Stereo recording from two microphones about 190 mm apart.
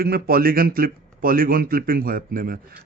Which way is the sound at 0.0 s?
50° right (ahead or behind).